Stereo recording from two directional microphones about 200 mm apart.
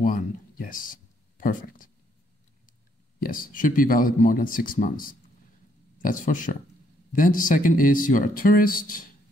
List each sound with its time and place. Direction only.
0.0 s speech: 45° left (ahead or behind)
3.2 s speech: 45° left (ahead or behind)